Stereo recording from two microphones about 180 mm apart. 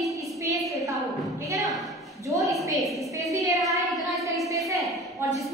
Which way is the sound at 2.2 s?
15° right (ahead or behind).